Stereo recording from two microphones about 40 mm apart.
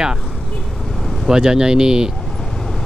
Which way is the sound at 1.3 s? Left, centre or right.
Centre.